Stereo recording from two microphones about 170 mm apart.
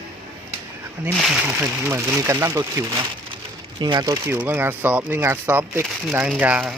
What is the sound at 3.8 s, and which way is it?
Speech, 25° right (ahead or behind).